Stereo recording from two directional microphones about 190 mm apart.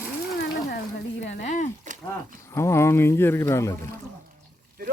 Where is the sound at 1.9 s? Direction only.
40° right (ahead or behind).